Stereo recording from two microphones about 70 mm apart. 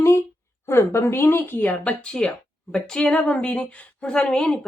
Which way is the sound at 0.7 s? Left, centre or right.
Left.